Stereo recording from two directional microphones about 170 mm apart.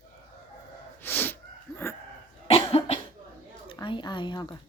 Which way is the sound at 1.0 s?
10° left (ahead or behind).